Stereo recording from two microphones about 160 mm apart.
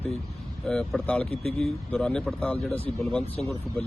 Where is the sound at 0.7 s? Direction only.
5° left (ahead or behind).